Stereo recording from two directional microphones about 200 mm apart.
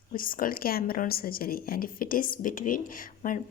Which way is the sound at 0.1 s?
45° left (ahead or behind).